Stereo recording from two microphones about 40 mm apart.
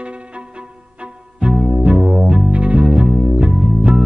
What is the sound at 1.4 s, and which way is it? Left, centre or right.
Music, right.